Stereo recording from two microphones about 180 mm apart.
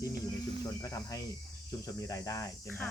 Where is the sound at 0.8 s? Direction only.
20° left (ahead or behind).